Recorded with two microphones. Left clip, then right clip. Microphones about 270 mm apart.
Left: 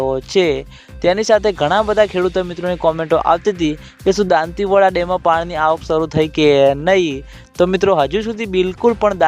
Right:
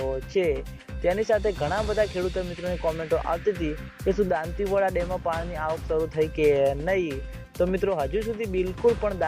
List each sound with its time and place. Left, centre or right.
0.0 s speech: left